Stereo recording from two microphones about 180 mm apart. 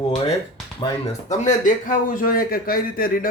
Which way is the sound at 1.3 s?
45° left (ahead or behind).